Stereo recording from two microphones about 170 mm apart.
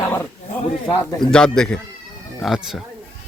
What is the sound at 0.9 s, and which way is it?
Speech, 5° left (ahead or behind).